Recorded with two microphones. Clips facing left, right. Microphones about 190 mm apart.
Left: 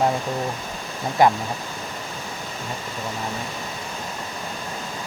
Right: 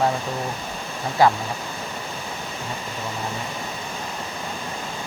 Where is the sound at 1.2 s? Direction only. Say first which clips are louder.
Even; 20° left (ahead or behind).